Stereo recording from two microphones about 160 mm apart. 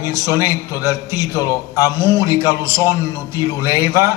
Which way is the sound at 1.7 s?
15° right (ahead or behind).